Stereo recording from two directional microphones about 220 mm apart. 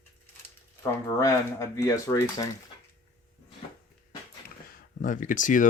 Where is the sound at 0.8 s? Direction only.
15° left (ahead or behind).